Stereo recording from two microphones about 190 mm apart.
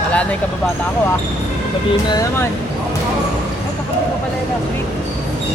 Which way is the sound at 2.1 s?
20° left (ahead or behind).